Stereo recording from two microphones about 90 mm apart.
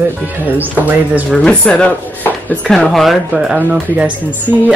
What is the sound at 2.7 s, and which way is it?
Speech, 5° left (ahead or behind).